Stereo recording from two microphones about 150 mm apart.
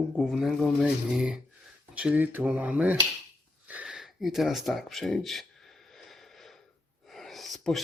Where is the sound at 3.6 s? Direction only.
10° right (ahead or behind).